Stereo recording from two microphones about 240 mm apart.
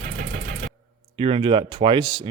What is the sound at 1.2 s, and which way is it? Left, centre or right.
Speech, right.